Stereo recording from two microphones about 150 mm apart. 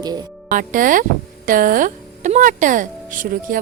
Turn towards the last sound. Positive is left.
turn(degrees=-65)  # may be behind; listen again after turning